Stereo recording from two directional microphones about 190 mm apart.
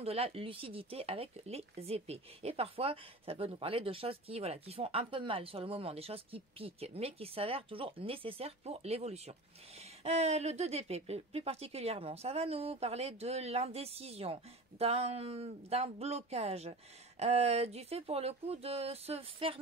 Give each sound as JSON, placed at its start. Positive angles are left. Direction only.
{"t": 0.0, "sound": "speech", "side_deg": -30}